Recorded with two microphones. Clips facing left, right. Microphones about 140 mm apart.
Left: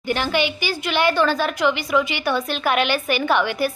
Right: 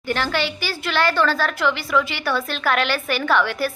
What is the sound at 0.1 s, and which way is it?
A woman's voice, 15° left (ahead or behind).